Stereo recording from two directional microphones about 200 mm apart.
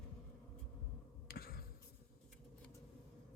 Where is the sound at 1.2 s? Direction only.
50° left (ahead or behind).